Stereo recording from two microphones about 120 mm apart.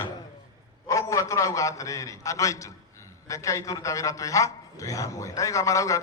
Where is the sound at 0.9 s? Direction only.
25° left (ahead or behind).